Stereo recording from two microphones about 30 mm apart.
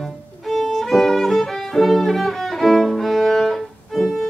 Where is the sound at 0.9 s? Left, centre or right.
Centre.